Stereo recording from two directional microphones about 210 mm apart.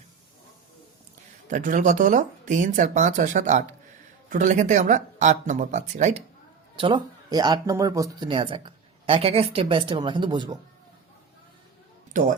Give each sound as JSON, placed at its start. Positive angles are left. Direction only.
{"t": 1.5, "sound": "speech", "side_deg": -40}
{"t": 6.7, "sound": "speech", "side_deg": -25}
{"t": 12.1, "sound": "speech", "side_deg": -40}